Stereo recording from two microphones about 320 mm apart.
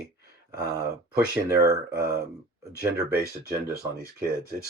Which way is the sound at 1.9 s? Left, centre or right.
Right.